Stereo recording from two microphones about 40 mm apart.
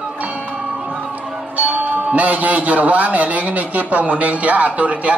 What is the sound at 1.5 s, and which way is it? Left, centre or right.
A man's voice, right.